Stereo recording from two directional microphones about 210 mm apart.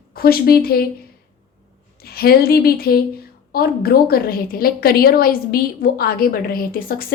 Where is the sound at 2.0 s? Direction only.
45° left (ahead or behind).